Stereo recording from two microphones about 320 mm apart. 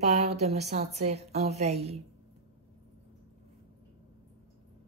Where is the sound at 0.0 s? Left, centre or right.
Right.